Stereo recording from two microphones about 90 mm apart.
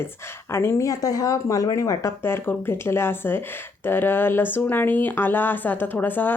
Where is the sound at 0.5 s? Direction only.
30° left (ahead or behind).